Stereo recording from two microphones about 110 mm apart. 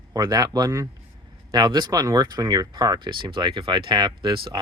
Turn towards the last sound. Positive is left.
turn(degrees=-50)  # may be behind; listen again after turning